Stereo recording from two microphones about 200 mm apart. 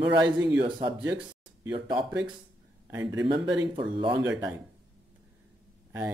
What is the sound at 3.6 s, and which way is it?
Speech, 25° right (ahead or behind).